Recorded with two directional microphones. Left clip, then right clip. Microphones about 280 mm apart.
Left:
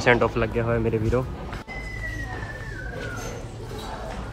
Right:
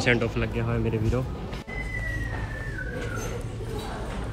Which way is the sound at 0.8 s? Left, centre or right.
Centre.